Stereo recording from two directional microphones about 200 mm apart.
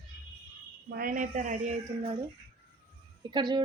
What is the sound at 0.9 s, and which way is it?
A woman's voice, 45° right (ahead or behind).